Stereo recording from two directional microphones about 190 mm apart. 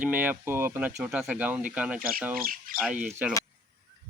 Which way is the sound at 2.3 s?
50° right (ahead or behind).